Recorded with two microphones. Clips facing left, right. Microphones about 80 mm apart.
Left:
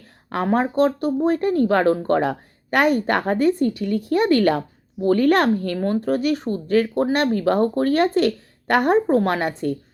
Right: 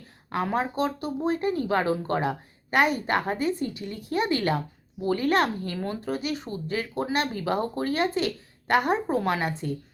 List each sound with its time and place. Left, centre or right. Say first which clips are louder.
0.3 s speech: left 6 dB; left